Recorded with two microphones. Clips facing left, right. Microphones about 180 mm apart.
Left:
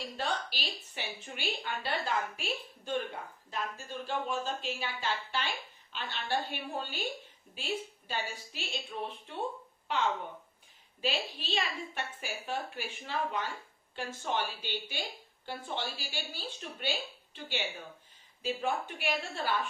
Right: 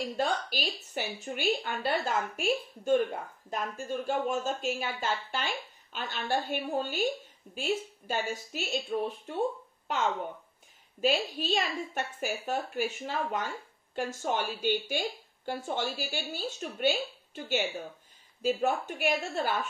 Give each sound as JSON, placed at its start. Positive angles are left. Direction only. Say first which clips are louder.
{"t": 0.2, "sound": "speech", "louder": "right 4 dB", "side_deg": -45}
{"t": 11.0, "sound": "speech", "louder": "right 7 dB", "side_deg": -45}